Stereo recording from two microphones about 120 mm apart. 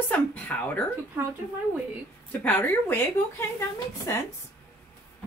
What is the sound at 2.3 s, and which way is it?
Speech, 15° left (ahead or behind).